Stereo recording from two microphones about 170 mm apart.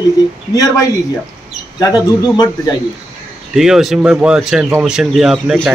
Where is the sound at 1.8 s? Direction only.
20° left (ahead or behind).